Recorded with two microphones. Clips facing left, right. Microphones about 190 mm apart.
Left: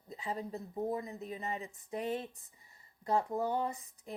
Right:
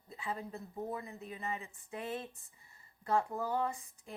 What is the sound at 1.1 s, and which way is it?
Speech, 35° left (ahead or behind).